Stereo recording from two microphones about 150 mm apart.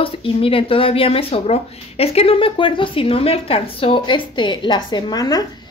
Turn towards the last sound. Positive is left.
turn(degrees=25)  # may be behind; listen again after turning